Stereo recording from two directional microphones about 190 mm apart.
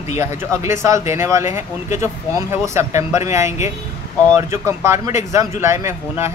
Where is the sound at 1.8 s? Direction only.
40° left (ahead or behind).